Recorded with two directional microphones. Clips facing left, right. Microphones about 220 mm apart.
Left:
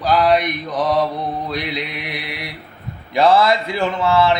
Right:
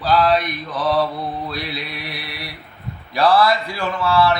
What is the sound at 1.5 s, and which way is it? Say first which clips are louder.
Speech: left 4 dB; 20° left (ahead or behind).